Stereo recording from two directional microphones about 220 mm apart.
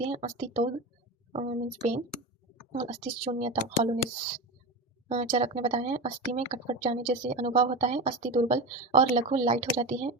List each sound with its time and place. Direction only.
0.1 s speech: 30° right (ahead or behind)
3.0 s speech: 30° right (ahead or behind)
5.0 s speech: 25° right (ahead or behind)
7.0 s speech: 35° right (ahead or behind)